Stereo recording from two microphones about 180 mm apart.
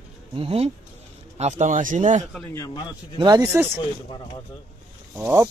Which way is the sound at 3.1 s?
25° right (ahead or behind).